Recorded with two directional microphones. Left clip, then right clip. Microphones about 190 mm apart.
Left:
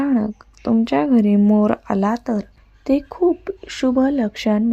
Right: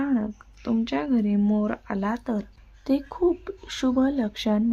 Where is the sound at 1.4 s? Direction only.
20° left (ahead or behind).